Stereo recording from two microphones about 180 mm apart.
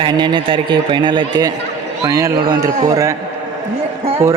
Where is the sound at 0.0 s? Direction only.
25° right (ahead or behind).